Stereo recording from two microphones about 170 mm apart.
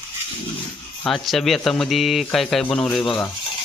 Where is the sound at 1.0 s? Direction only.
Centre (ahead or behind).